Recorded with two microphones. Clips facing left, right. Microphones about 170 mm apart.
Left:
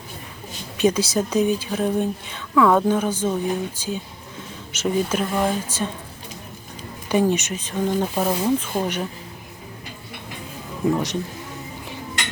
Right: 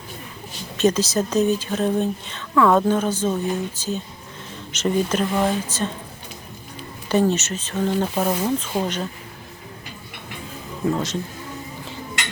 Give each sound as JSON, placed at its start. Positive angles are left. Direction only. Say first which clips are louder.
{"t": 0.8, "sound": "a woman's voice", "louder": "even", "side_deg": 10}
{"t": 7.1, "sound": "a woman's voice", "louder": "even", "side_deg": 10}
{"t": 10.9, "sound": "a woman's voice", "louder": "left 1 dB", "side_deg": 15}